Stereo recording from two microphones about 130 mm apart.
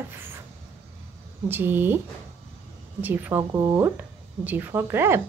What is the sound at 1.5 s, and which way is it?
Speech, 15° right (ahead or behind).